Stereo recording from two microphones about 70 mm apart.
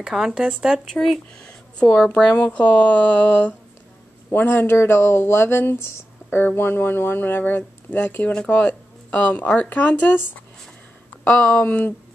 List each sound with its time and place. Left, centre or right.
0.0 s speech: centre
0.9 s speech: centre
2.0 s a woman's voice: centre
4.3 s speech: left